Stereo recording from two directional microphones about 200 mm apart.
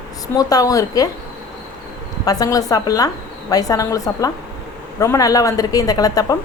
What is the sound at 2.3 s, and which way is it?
A woman's voice, 15° left (ahead or behind).